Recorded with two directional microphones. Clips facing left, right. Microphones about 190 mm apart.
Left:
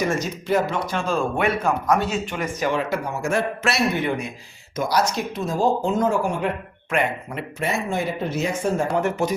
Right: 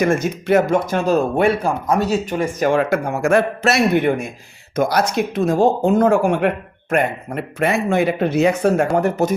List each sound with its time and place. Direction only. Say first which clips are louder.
0.1 s speech: right 6 dB; 60° right (ahead or behind)
0.7 s a man's voice: right 8 dB; 45° right (ahead or behind); by 6.5 s 65° right (ahead or behind)
6.9 s speech: right 5 dB; 55° right (ahead or behind)
9.0 s speech: right 4 dB; 40° right (ahead or behind)